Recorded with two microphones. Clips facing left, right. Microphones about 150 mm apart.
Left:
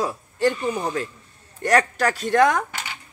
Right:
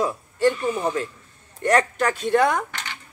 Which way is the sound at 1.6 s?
35° left (ahead or behind).